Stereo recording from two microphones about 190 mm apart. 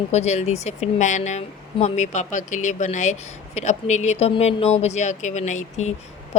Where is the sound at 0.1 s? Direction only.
35° left (ahead or behind).